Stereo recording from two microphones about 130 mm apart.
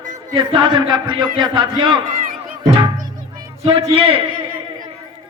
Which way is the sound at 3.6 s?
45° right (ahead or behind).